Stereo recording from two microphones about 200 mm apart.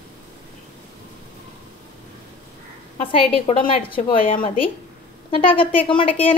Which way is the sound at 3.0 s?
25° left (ahead or behind).